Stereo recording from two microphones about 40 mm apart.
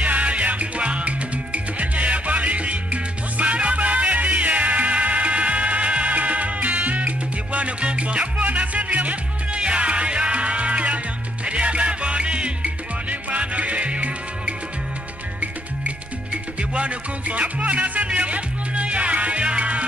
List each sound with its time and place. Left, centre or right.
0.0 s music: right
16.7 s music: right